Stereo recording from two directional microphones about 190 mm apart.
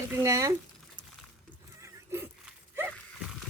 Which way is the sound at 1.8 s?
10° right (ahead or behind).